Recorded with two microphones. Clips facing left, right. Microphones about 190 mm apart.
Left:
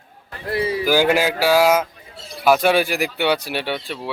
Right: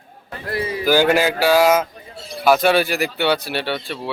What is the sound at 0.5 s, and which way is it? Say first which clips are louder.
Speech: left 3 dB; 30° left (ahead or behind).